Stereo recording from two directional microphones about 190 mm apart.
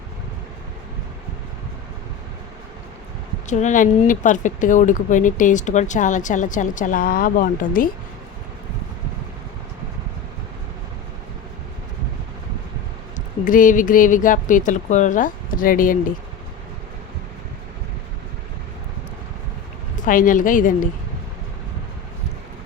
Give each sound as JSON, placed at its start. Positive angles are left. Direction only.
{"t": 3.5, "sound": "speech", "side_deg": 40}
{"t": 13.1, "sound": "speech", "side_deg": 45}
{"t": 20.1, "sound": "speech", "side_deg": 45}